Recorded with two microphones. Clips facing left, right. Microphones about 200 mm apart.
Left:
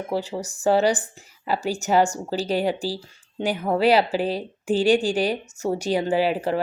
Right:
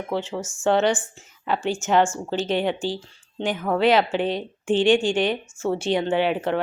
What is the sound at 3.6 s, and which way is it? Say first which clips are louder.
Speech: even; 15° left (ahead or behind).